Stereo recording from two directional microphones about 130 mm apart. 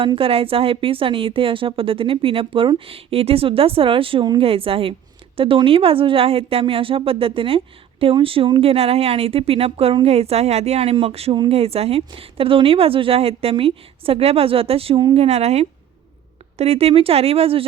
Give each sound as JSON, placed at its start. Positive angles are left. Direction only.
{"t": 0.0, "sound": "a woman's voice", "side_deg": -45}